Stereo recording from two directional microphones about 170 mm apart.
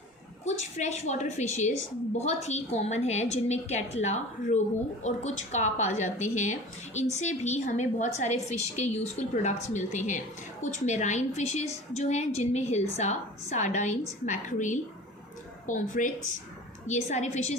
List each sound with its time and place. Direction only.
0.4 s a woman's voice: 40° left (ahead or behind)